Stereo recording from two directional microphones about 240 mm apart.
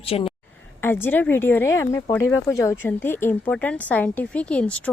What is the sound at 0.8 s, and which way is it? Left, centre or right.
Speech, centre.